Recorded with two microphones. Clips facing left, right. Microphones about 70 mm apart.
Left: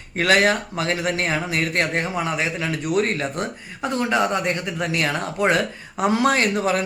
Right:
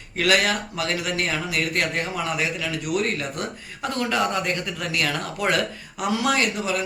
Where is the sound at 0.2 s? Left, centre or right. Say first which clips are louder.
Left 3 dB; left.